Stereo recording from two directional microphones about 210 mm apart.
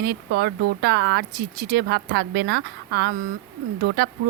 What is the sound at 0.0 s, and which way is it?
Speech, 50° right (ahead or behind).